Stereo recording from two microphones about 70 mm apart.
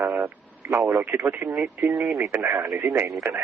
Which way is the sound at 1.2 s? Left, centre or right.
Right.